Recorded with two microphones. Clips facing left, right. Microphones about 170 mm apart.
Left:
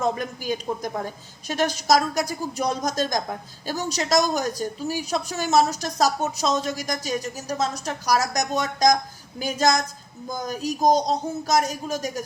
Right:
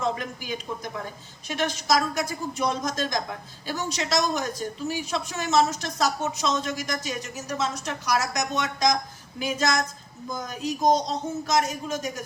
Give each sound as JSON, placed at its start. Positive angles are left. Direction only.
{"t": 0.0, "sound": "speech", "side_deg": 40}